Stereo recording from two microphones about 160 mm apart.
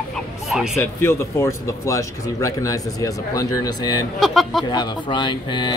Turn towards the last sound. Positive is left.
turn(degrees=30)  # may be behind; listen again after turning